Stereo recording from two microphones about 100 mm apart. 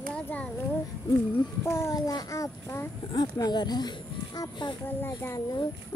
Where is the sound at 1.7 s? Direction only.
25° left (ahead or behind).